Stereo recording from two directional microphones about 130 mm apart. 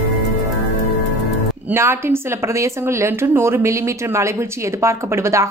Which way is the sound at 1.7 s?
20° right (ahead or behind).